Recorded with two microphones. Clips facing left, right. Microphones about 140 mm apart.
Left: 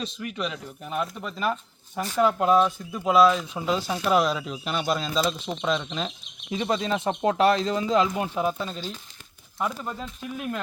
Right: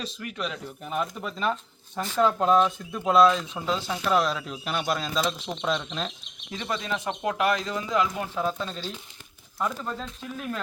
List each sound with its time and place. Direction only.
0.0 s speech: centre (ahead or behind)
6.5 s speech: 20° left (ahead or behind)